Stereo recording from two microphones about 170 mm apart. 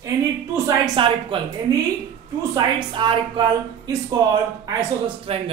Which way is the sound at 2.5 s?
30° right (ahead or behind).